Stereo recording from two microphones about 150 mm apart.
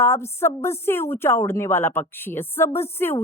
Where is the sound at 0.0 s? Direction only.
15° left (ahead or behind).